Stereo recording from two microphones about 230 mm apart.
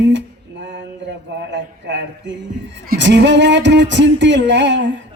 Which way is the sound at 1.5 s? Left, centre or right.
Right.